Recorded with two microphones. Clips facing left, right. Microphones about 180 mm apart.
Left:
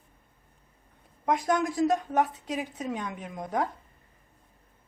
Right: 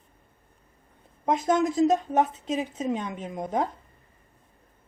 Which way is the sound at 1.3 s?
20° right (ahead or behind).